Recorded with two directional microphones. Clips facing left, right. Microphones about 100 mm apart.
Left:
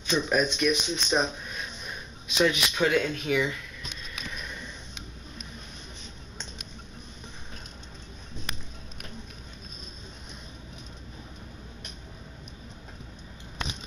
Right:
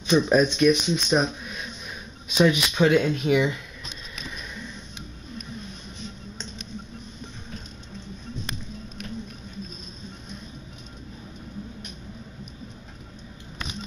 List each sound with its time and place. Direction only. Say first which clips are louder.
0.0 s speech: right 6 dB; 20° right (ahead or behind)
0.6 s speech: right 7 dB; 5° right (ahead or behind)
2.3 s speech: right 4 dB; 15° right (ahead or behind)